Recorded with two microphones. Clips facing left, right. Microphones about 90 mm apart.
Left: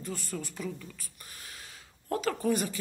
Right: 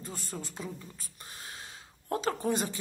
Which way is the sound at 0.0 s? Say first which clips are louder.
Left 3 dB; 20° right (ahead or behind).